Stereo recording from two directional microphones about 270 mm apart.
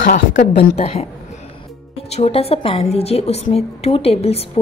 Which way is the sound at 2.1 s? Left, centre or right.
Left.